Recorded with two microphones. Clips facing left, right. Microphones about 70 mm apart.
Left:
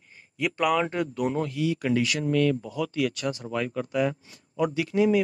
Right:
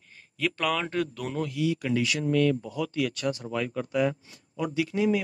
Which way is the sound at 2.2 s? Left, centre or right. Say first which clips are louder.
Even; left.